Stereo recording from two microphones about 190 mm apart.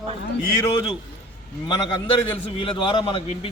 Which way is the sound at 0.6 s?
25° left (ahead or behind).